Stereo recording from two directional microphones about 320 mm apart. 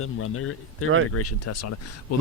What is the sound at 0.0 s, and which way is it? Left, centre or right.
Speech, left.